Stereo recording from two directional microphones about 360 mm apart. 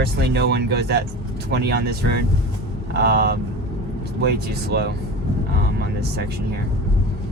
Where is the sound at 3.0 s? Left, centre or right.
Right.